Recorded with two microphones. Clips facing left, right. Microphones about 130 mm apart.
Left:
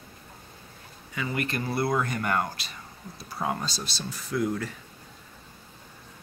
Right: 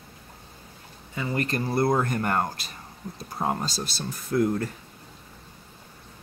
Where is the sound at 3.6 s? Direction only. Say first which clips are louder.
Right 3 dB; 50° right (ahead or behind).